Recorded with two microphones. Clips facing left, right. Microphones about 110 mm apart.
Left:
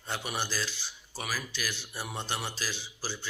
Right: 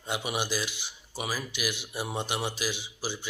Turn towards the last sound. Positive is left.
turn(degrees=-15)  # may be behind; listen again after turning